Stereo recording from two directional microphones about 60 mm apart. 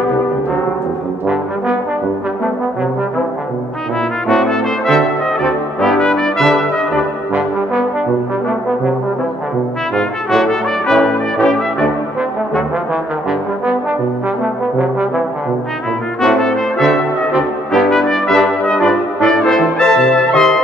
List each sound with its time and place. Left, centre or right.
4.3 s brass instrument: centre
9.9 s brass instrument: centre
14.4 s brass instrument: centre
16.2 s brass instrument: centre